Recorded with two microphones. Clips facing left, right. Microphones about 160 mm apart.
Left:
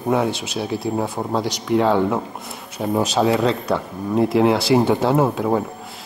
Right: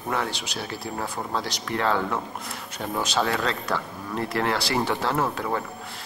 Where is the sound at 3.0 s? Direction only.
Centre (ahead or behind).